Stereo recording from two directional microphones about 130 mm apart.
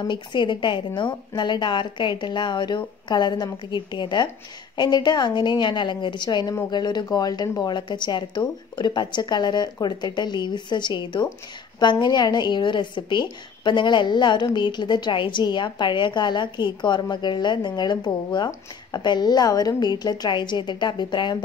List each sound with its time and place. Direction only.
0.0 s a woman's voice: 35° left (ahead or behind)